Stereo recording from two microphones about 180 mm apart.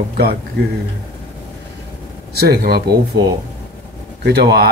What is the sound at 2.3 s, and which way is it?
Speech, 60° right (ahead or behind).